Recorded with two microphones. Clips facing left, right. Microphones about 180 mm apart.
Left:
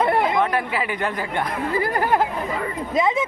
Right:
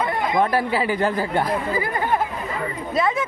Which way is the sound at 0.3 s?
35° right (ahead or behind).